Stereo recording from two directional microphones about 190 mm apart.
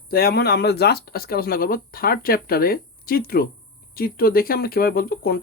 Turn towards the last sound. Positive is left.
turn(degrees=50)  # may be behind; listen again after turning